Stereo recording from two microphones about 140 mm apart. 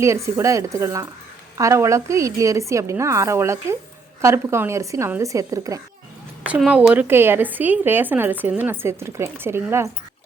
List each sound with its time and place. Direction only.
0.0 s a woman's voice: 20° right (ahead or behind)
6.6 s a woman's voice: 5° right (ahead or behind)